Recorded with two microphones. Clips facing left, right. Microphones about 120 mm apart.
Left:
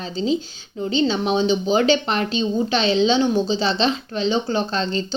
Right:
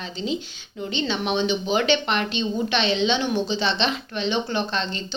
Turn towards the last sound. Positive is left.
turn(degrees=35)  # may be behind; listen again after turning